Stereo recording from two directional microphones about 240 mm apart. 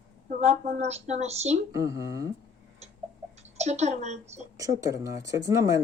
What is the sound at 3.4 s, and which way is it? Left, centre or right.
A woman's voice, right.